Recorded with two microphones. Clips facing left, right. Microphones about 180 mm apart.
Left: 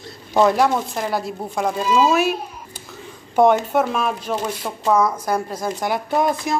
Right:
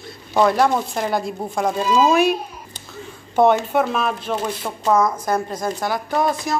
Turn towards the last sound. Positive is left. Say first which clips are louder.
# left 1 dB
turn(degrees=20)  # may be behind; listen again after turning